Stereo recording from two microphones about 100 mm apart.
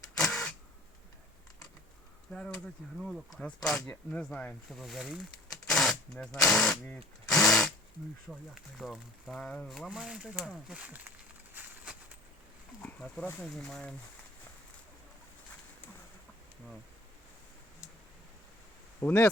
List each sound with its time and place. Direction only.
0.0 s printer: 5° left (ahead or behind)
3.0 s speech: 5° right (ahead or behind)
4.7 s speech: centre (ahead or behind)
5.6 s a sound: 5° left (ahead or behind)
7.3 s sewing machine: 5° left (ahead or behind)
8.3 s speech: centre (ahead or behind)
9.7 s speech: 5° right (ahead or behind)
11.5 s a sound: 15° right (ahead or behind)
12.8 s wild animals: 15° left (ahead or behind)
13.5 s speech: 5° left (ahead or behind)
18.9 s speech: 15° left (ahead or behind)